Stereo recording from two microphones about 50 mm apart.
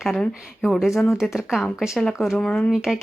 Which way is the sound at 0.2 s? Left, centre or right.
Centre.